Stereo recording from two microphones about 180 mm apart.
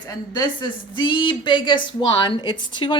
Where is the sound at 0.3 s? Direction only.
25° left (ahead or behind).